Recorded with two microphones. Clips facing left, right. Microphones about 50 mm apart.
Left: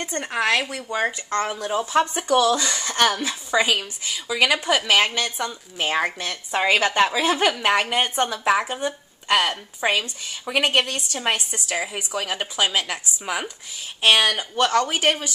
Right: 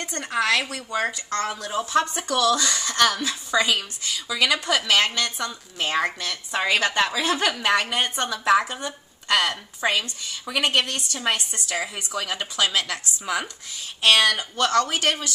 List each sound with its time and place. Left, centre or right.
0.0 s a woman's voice: left